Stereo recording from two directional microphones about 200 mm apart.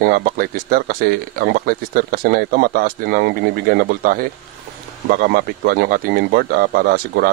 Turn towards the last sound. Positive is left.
turn(degrees=-50)  # may be behind; listen again after turning